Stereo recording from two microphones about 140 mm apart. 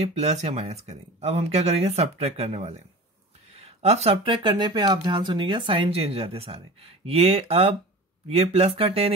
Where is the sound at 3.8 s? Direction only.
50° right (ahead or behind).